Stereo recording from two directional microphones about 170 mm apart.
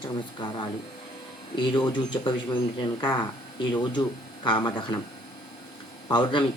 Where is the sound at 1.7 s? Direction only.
25° left (ahead or behind).